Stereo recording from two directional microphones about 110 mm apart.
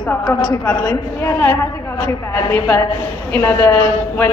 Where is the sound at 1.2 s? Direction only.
20° left (ahead or behind).